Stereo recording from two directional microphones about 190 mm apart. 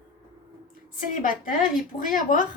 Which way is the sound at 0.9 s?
45° left (ahead or behind).